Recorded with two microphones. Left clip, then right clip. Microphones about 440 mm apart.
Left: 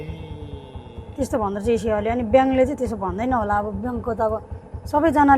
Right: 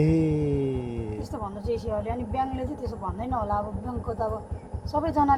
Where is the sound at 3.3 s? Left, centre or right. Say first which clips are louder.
Left 6 dB; left.